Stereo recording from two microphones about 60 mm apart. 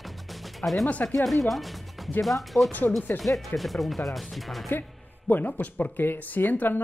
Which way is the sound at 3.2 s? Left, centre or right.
Left.